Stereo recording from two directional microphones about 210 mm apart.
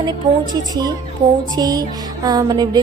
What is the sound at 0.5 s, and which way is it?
A woman's voice, 20° right (ahead or behind).